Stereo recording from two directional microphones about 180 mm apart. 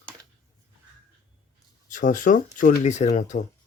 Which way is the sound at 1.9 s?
45° left (ahead or behind).